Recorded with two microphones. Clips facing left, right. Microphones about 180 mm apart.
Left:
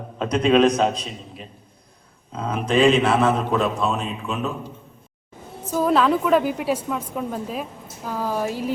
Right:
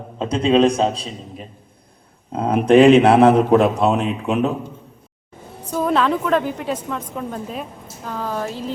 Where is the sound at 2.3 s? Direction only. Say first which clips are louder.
Right 8 dB; 60° right (ahead or behind).